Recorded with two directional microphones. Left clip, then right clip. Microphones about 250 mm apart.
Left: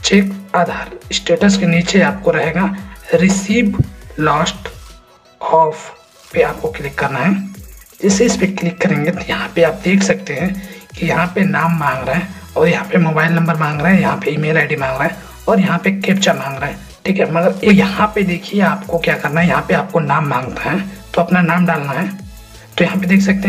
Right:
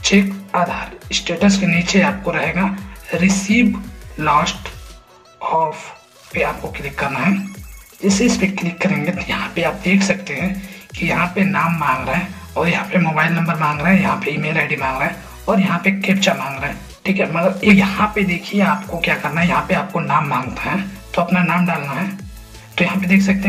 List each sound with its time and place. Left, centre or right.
0.0 s speech: centre
6.3 s speech: centre